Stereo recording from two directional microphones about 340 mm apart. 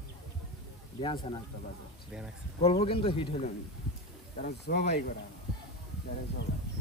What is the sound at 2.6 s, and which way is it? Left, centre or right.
Speech, centre.